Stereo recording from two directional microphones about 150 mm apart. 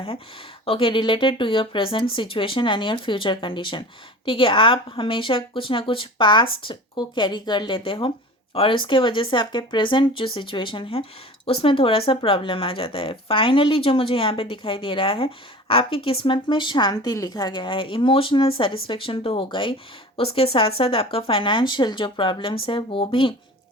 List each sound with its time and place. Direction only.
0.6 s speech: 35° left (ahead or behind)